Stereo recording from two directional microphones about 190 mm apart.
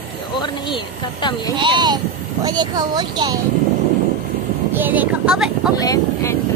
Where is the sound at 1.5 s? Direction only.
25° right (ahead or behind).